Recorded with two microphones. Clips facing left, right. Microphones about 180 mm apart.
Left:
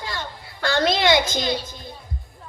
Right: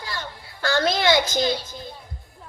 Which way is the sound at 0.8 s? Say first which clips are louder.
Left 1 dB; 20° left (ahead or behind).